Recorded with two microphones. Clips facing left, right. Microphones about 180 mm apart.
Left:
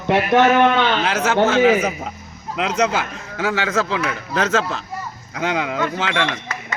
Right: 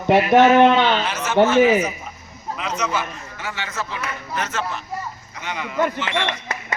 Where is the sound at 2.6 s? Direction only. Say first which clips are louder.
Left 6 dB; 90° left.